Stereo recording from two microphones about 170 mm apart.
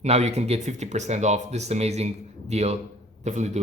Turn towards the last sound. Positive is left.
turn(degrees=-45)  # may be behind; listen again after turning